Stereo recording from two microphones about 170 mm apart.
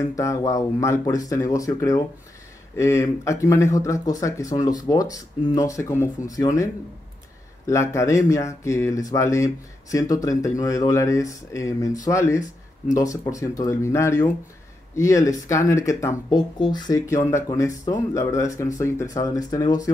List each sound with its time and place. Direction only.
0.0 s speech: 20° left (ahead or behind)